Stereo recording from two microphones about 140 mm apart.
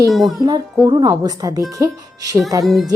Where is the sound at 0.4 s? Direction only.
25° right (ahead or behind).